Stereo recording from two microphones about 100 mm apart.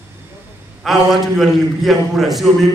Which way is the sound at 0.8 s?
Centre (ahead or behind).